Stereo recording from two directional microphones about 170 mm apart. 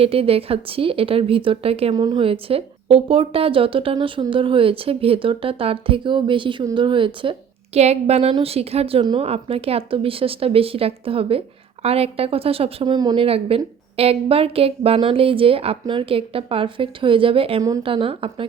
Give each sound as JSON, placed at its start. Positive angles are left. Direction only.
{"t": 0.0, "sound": "a woman's voice", "side_deg": -35}